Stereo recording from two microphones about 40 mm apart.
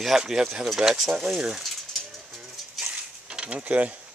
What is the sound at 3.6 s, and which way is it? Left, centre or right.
Mechanisms, right.